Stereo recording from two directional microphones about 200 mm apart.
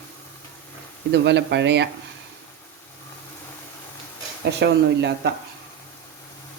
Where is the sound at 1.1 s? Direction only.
60° right (ahead or behind).